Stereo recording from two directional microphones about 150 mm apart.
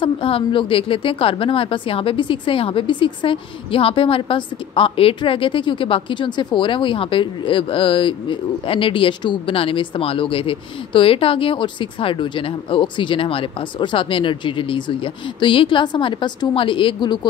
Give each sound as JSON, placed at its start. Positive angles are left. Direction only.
{"t": 0.0, "sound": "a woman's voice", "side_deg": 35}